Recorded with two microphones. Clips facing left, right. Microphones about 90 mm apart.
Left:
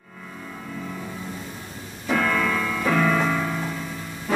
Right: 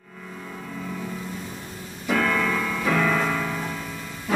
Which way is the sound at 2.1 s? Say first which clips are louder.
Left 1 dB; centre (ahead or behind).